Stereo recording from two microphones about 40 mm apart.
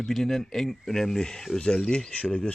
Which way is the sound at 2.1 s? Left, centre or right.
Left.